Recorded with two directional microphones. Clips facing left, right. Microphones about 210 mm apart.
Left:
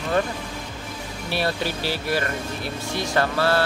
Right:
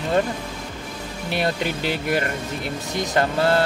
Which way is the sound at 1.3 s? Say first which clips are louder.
Right 2 dB; 20° right (ahead or behind).